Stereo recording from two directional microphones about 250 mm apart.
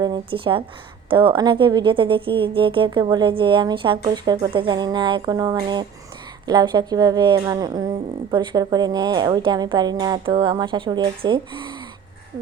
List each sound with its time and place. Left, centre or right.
0.0 s a woman's voice: centre